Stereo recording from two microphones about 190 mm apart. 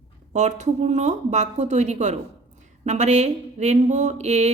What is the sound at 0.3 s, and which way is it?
Speech, 40° right (ahead or behind).